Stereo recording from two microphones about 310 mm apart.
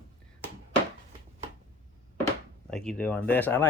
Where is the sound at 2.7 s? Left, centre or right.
Centre.